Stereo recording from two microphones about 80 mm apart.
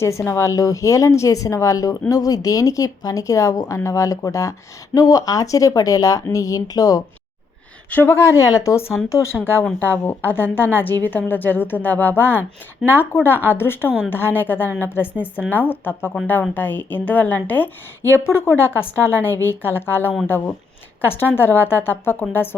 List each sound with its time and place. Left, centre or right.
0.0 s a woman's voice: left
8.0 s a woman's voice: left
18.3 s a woman's voice: left